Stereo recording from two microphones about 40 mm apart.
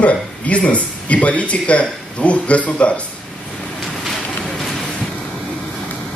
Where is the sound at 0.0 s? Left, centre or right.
Left.